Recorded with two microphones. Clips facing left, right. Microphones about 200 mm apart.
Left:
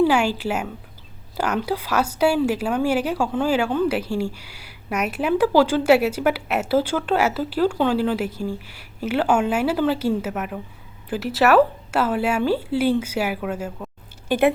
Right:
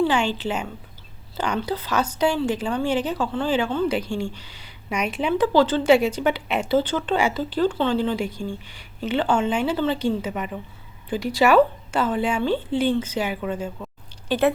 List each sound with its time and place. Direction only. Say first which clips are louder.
0.0 s a woman's voice: left 3 dB; 10° left (ahead or behind)